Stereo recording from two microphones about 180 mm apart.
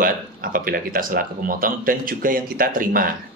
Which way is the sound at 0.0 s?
50° right (ahead or behind).